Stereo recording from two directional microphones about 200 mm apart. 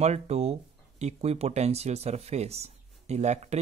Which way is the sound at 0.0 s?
30° right (ahead or behind).